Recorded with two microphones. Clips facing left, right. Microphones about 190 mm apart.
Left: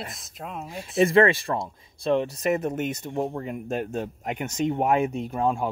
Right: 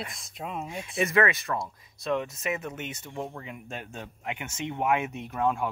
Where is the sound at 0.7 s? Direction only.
30° left (ahead or behind).